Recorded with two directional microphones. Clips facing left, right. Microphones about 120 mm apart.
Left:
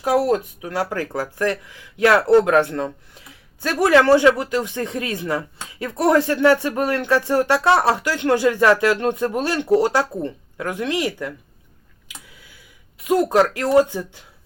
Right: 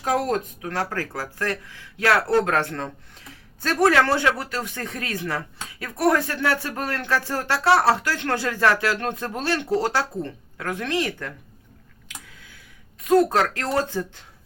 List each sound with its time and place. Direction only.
0.0 s speech: 10° left (ahead or behind)
13.1 s speech: 15° left (ahead or behind)